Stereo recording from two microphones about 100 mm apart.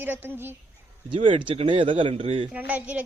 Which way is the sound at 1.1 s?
60° right (ahead or behind).